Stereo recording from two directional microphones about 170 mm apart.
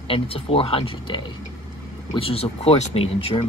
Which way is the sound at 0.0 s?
35° left (ahead or behind).